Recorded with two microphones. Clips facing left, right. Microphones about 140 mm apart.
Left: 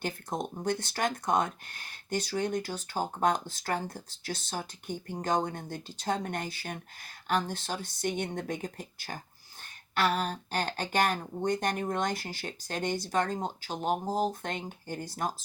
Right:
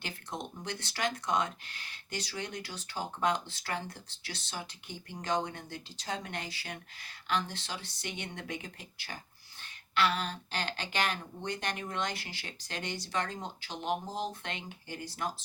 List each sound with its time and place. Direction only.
0.0 s speech: 45° left (ahead or behind)